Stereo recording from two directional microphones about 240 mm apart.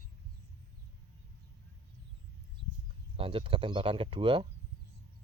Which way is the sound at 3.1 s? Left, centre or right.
Right.